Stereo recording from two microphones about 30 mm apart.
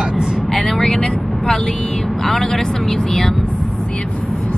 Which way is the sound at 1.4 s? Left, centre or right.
Left.